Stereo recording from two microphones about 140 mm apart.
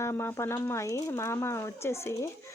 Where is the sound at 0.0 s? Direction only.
15° left (ahead or behind).